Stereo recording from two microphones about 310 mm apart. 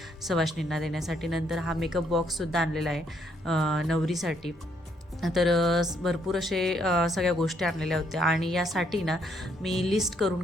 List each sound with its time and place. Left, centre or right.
0.3 s speech: centre